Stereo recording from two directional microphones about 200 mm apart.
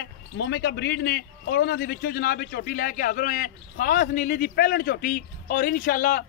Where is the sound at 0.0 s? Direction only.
60° left (ahead or behind).